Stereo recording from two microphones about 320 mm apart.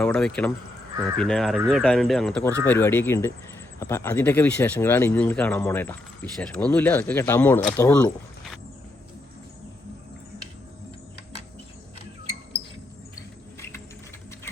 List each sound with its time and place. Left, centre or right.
0.0 s speech: centre
11.9 s rodents: centre